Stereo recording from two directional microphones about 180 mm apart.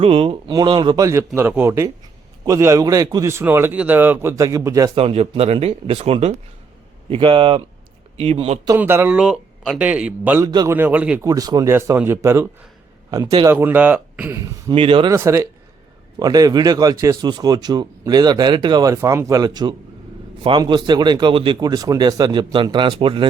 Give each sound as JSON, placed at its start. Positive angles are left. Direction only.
{"t": 0.0, "sound": "a man's voice", "side_deg": -30}
{"t": 4.9, "sound": "speech", "side_deg": -35}
{"t": 8.6, "sound": "a man's voice", "side_deg": -15}
{"t": 10.4, "sound": "speech", "side_deg": -20}
{"t": 10.8, "sound": "a man's voice", "side_deg": -10}
{"t": 11.3, "sound": "a man's voice", "side_deg": -20}
{"t": 14.8, "sound": "speech", "side_deg": -30}
{"t": 15.1, "sound": "a man's voice", "side_deg": -15}